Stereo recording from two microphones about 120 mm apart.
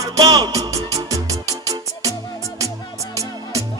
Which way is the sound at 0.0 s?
30° right (ahead or behind).